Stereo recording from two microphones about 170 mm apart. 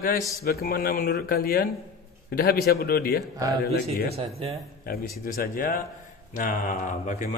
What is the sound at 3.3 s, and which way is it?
Speech, 20° right (ahead or behind).